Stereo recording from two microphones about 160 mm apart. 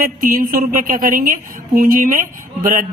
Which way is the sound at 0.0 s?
60° right (ahead or behind).